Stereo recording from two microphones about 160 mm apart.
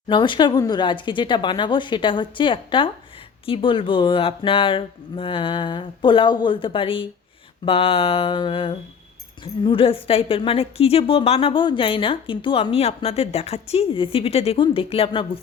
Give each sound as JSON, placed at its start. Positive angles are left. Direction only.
{"t": 0.1, "sound": "a woman's voice", "side_deg": 30}